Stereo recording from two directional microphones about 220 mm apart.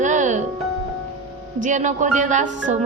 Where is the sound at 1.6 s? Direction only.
35° right (ahead or behind).